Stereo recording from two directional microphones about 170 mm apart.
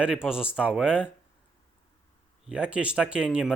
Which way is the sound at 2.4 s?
5° right (ahead or behind).